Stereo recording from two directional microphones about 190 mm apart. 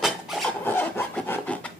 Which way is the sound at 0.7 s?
10° left (ahead or behind).